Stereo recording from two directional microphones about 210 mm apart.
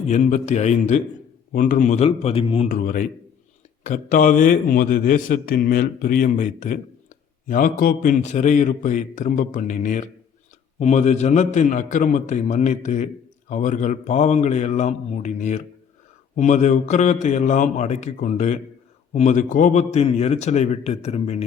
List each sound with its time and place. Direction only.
0.1 s a man's voice: 35° left (ahead or behind)
2.6 s a man's voice: 40° left (ahead or behind)